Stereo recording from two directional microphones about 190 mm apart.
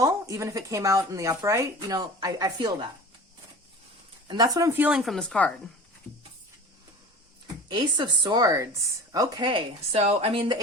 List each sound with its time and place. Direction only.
0.0 s speech: 15° right (ahead or behind)
4.3 s speech: 20° right (ahead or behind)
4.9 s speech: centre (ahead or behind)
7.7 s speech: 20° right (ahead or behind)